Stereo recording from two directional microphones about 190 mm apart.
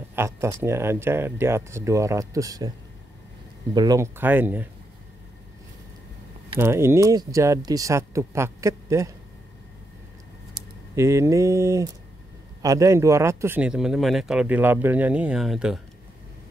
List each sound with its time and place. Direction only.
0.1 s speech: 15° right (ahead or behind)
3.7 s speech: 20° right (ahead or behind)
6.6 s speech: 15° right (ahead or behind)
10.5 s speech: 15° right (ahead or behind)